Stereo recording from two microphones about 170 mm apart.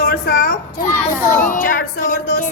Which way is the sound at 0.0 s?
70° left (ahead or behind).